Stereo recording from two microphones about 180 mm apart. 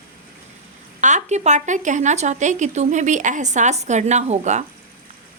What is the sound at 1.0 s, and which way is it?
Speech, 40° right (ahead or behind).